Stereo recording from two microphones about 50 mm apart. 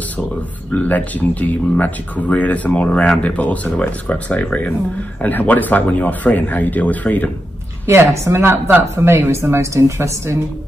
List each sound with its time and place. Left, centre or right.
0.7 s speech: left
7.8 s a woman's voice: right